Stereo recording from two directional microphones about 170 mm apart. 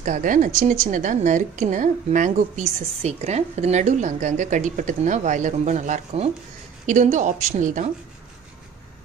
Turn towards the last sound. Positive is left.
turn(degrees=-45)  # may be behind; listen again after turning